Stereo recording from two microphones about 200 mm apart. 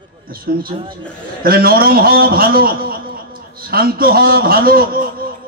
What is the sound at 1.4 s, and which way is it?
A man's voice, 50° right (ahead or behind).